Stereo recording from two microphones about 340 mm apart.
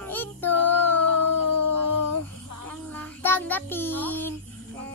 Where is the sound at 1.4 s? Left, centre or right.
Right.